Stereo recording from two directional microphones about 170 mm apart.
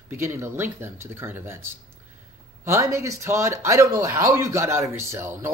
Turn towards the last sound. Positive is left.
turn(degrees=-15)  # may be behind; listen again after turning